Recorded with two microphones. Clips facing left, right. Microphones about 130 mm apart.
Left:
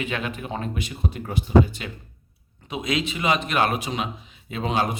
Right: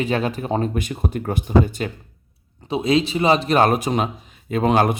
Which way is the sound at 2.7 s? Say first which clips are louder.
Right 7 dB; 30° right (ahead or behind).